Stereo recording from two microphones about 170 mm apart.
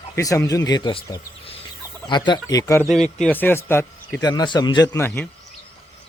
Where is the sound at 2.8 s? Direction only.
Centre (ahead or behind).